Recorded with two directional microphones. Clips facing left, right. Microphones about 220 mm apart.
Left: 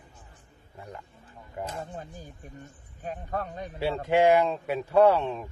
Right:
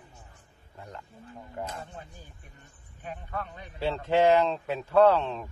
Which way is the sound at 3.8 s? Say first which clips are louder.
Left 1 dB; 10° left (ahead or behind).